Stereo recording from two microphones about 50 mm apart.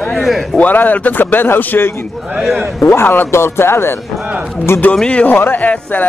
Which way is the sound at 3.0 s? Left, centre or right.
Left.